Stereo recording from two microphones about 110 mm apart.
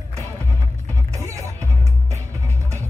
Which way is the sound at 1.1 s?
30° right (ahead or behind).